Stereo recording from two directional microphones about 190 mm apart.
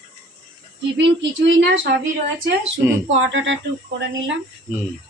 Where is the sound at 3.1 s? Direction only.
75° right (ahead or behind).